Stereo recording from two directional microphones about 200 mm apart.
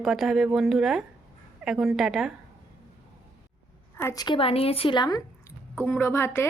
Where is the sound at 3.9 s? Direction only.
15° left (ahead or behind).